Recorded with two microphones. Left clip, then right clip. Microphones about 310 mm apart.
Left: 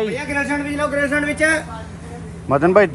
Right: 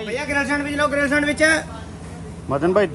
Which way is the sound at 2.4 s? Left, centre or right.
Centre.